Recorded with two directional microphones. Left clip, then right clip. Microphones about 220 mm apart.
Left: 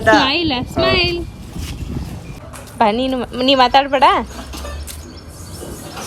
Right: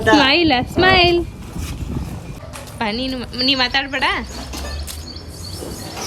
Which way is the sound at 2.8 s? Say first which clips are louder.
Left 8 dB; centre (ahead or behind).